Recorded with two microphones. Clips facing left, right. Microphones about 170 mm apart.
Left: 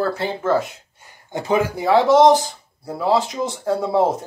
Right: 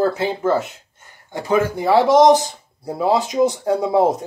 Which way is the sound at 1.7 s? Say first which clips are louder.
Even; 5° right (ahead or behind).